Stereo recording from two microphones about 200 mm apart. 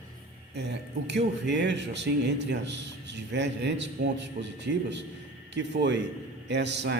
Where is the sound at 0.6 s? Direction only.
60° right (ahead or behind).